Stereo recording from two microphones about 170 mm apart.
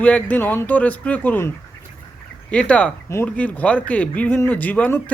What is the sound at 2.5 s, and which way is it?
Speech, 5° left (ahead or behind).